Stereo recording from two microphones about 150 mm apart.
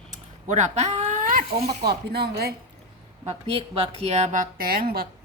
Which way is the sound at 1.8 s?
90° right.